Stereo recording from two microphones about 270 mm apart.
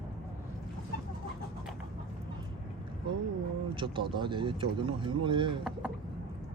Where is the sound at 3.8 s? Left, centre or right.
Centre.